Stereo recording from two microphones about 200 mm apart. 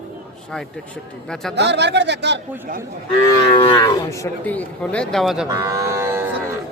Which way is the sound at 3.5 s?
20° left (ahead or behind).